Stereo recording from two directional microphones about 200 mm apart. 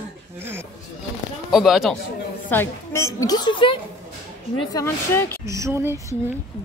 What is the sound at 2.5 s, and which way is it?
A woman's voice, 10° left (ahead or behind).